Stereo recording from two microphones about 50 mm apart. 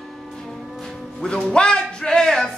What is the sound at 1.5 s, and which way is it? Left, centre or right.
Music, centre.